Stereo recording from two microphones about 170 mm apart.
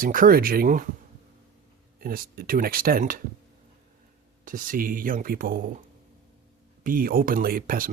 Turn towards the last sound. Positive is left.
turn(degrees=-55)  # may be behind; listen again after turning